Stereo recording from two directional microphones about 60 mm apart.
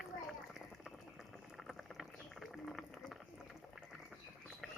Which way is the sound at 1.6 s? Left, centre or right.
Centre.